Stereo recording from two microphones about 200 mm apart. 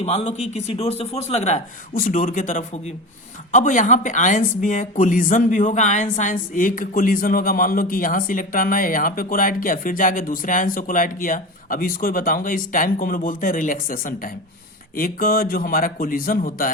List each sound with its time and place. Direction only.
0.0 s a man's voice: 30° left (ahead or behind)